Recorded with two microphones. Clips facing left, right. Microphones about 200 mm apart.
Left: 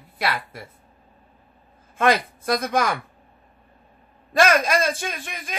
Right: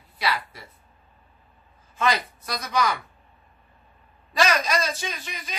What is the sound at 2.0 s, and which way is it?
Speech, 50° left (ahead or behind).